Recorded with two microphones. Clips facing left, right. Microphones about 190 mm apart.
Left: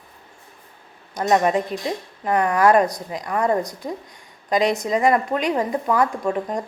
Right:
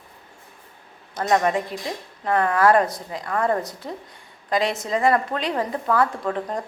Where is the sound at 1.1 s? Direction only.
20° left (ahead or behind).